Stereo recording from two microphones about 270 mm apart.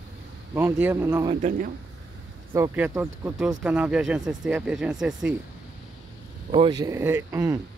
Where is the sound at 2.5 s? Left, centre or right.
Centre.